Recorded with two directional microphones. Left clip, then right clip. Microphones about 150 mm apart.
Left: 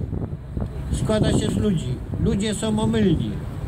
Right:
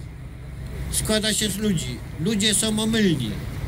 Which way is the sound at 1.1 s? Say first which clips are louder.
Left 1 dB; 45° left (ahead or behind).